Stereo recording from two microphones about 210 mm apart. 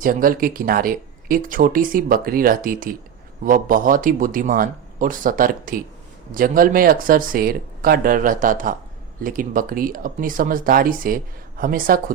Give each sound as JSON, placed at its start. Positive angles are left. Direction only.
{"t": 0.0, "sound": "speech", "side_deg": -40}